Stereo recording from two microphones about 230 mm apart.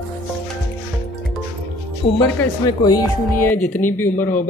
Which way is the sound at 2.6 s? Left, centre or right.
Centre.